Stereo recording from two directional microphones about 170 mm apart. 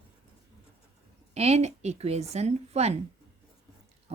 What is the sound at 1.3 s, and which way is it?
Speech, 40° right (ahead or behind).